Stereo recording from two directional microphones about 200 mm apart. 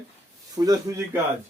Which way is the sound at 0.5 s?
20° right (ahead or behind).